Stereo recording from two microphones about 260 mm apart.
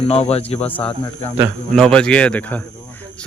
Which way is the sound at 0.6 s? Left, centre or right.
Centre.